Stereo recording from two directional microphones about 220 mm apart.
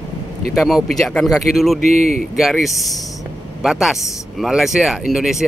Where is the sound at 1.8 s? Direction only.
40° left (ahead or behind).